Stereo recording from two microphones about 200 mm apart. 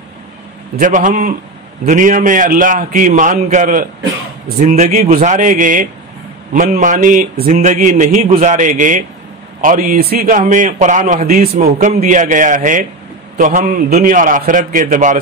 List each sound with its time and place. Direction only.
0.7 s a man's voice: 40° right (ahead or behind)